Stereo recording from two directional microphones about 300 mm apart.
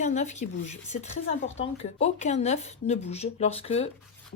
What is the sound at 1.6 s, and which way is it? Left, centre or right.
Speech, centre.